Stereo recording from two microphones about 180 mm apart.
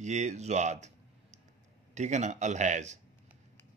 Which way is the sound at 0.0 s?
40° right (ahead or behind).